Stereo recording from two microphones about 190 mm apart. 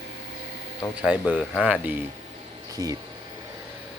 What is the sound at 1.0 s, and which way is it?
Speech, 5° right (ahead or behind).